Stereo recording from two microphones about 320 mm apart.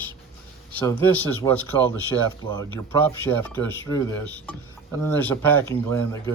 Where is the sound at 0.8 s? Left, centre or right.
Centre.